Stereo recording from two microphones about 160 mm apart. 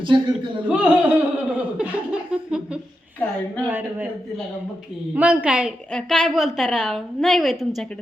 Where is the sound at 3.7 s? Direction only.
10° right (ahead or behind).